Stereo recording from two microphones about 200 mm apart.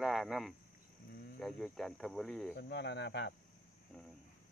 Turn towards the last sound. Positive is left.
turn(degrees=60)  # may be behind; listen again after turning